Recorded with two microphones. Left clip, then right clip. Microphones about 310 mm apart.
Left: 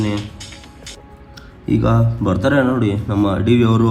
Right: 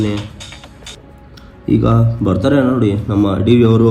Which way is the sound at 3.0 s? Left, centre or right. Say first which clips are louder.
Right 2 dB; left.